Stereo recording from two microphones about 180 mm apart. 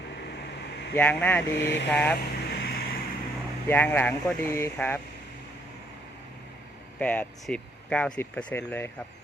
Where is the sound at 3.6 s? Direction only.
10° left (ahead or behind).